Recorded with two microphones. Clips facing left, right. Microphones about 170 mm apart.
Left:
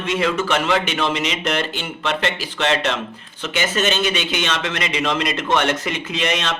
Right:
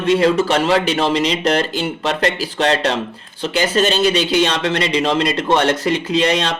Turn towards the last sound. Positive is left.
turn(degrees=-35)  # may be behind; listen again after turning